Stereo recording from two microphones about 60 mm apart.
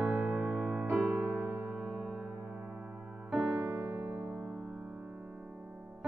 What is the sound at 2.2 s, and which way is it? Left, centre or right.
Music, centre.